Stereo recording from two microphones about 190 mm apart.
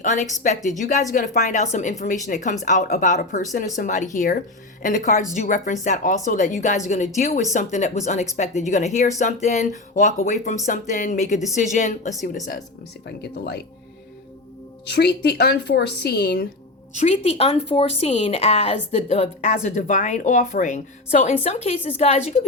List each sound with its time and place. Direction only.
0.0 s speech: 40° left (ahead or behind)
13.1 s speech: 60° left (ahead or behind)
14.8 s speech: 60° left (ahead or behind)
16.9 s speech: 35° left (ahead or behind)